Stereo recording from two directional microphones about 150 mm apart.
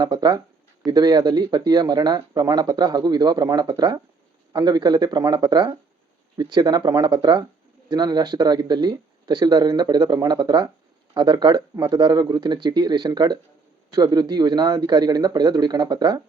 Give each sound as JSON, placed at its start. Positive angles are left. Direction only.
{"t": 0.0, "sound": "speech", "side_deg": -25}